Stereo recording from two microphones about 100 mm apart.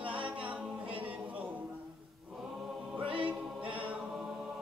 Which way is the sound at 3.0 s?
60° right (ahead or behind).